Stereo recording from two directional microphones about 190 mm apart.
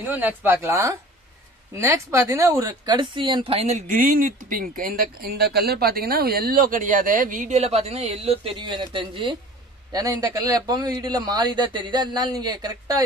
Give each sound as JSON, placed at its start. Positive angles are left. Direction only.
{"t": 0.0, "sound": "a man's voice", "side_deg": -10}